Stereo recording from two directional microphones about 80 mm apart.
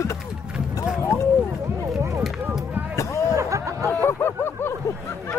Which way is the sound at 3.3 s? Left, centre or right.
Right.